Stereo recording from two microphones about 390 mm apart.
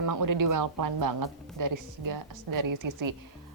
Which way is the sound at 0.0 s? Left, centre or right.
Right.